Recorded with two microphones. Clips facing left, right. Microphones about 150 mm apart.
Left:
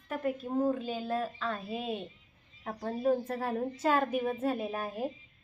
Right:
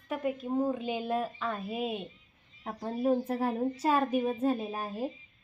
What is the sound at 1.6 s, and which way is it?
A woman's voice, 20° right (ahead or behind).